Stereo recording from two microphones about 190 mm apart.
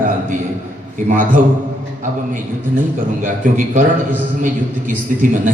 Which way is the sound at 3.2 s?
45° right (ahead or behind).